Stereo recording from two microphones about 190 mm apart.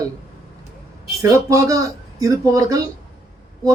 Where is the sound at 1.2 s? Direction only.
15° right (ahead or behind).